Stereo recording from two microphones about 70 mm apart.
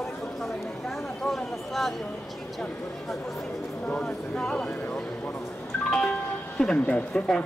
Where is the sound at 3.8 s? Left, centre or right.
Centre.